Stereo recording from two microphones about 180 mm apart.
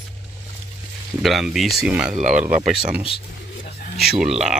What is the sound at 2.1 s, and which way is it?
Speech, 45° right (ahead or behind).